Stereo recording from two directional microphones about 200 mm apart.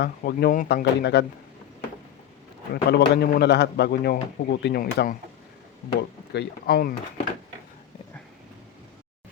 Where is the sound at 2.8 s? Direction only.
55° left (ahead or behind).